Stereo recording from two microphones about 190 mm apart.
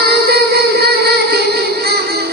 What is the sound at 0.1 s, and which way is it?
Music, 55° right (ahead or behind).